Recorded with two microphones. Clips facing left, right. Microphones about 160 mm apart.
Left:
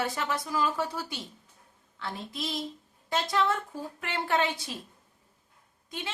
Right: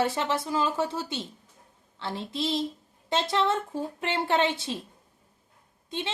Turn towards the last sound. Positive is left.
turn(degrees=-25)  # may be behind; listen again after turning